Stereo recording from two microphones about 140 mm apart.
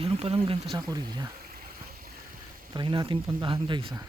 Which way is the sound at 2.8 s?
35° right (ahead or behind).